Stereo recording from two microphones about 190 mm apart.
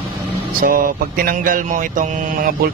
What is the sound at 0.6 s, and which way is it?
Mantra, 50° right (ahead or behind).